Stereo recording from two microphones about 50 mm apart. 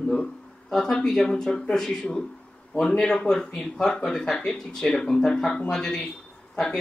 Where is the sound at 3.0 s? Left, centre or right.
Centre.